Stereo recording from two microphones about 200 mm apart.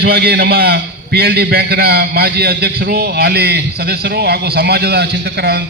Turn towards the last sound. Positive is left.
turn(degrees=-55)  # may be behind; listen again after turning